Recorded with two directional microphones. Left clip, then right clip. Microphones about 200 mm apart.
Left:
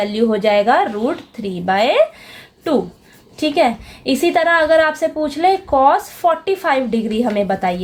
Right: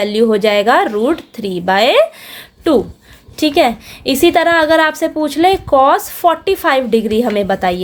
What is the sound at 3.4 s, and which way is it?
A woman's voice, 40° right (ahead or behind).